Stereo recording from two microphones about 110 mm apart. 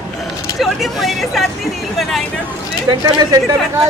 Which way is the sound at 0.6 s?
Centre (ahead or behind).